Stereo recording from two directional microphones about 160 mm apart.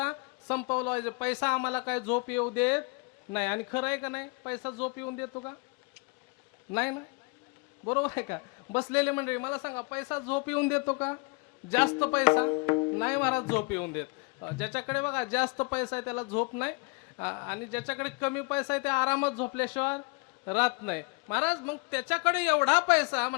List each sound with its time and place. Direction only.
0.0 s a man's voice: 10° left (ahead or behind)
6.7 s a man's voice: 15° left (ahead or behind)
12.5 s music: 25° left (ahead or behind)
13.0 s a man's voice: 10° left (ahead or behind)